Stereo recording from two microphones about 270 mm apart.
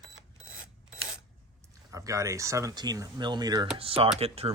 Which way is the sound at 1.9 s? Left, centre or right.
Centre.